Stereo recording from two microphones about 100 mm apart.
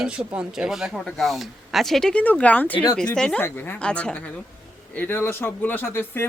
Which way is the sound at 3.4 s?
20° left (ahead or behind).